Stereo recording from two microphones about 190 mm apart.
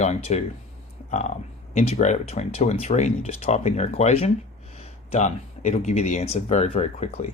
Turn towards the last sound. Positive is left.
turn(degrees=35)  # may be behind; listen again after turning